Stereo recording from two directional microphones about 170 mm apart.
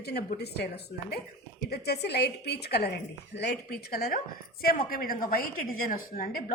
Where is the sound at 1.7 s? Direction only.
70° left (ahead or behind).